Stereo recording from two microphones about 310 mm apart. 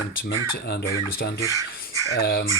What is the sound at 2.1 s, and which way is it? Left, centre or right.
Speech, left.